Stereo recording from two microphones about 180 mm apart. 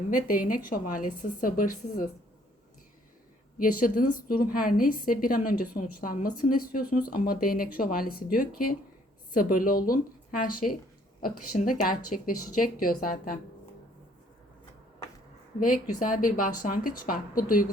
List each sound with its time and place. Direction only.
0.1 s a woman's voice: 50° left (ahead or behind)
3.6 s a woman's voice: 50° left (ahead or behind)
15.6 s a woman's voice: 50° left (ahead or behind)